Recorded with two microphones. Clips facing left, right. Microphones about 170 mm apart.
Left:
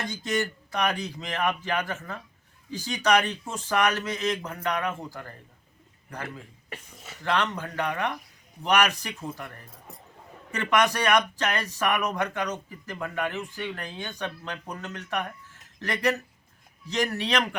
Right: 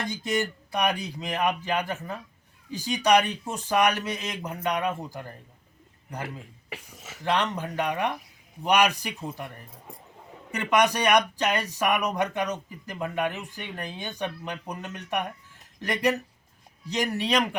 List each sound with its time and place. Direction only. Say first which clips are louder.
0.1 s speech: right 1 dB; 15° right (ahead or behind)